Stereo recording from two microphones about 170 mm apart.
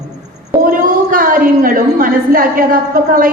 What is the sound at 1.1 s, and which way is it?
A woman's voice, 55° right (ahead or behind).